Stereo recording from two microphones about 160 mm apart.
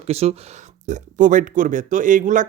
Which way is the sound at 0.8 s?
50° right (ahead or behind).